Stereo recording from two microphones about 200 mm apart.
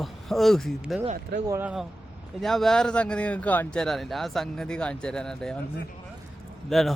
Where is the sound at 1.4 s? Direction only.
10° right (ahead or behind).